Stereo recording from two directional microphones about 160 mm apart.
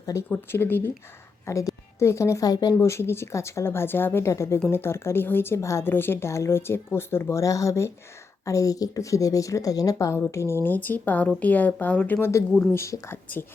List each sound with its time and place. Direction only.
0.0 s a woman's voice: 20° left (ahead or behind)